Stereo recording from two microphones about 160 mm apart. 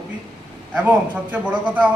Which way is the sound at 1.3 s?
10° right (ahead or behind).